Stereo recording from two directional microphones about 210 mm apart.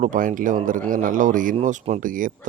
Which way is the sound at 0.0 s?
40° right (ahead or behind).